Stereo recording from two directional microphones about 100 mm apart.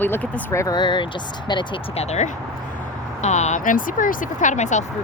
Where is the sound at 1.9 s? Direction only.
90° left.